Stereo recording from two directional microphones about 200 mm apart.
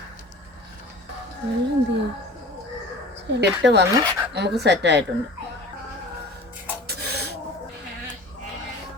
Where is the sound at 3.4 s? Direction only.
60° right (ahead or behind).